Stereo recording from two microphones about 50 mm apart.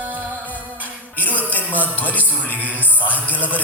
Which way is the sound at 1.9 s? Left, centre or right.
Left.